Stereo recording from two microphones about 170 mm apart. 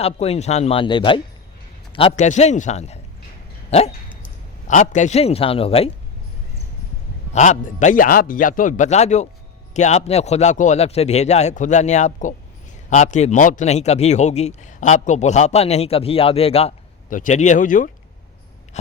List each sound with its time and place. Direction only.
0.0 s a man's voice: 40° left (ahead or behind)
2.1 s a man's voice: 45° left (ahead or behind)
3.7 s dog: 40° left (ahead or behind)
4.7 s a man's voice: 45° left (ahead or behind)
7.3 s a man's voice: 45° left (ahead or behind)
17.1 s a man's voice: 50° left (ahead or behind)